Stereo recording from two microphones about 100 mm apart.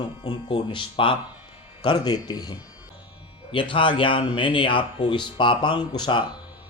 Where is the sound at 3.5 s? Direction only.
60° left (ahead or behind).